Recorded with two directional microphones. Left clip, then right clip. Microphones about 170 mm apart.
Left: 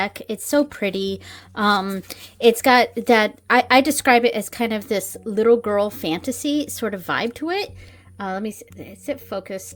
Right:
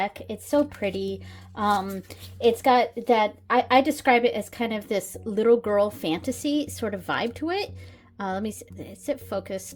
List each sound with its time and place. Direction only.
0.0 s a woman's voice: 30° left (ahead or behind); by 9.6 s 15° left (ahead or behind)